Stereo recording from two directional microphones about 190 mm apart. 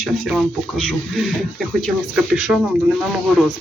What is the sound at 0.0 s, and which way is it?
Speech, centre (ahead or behind).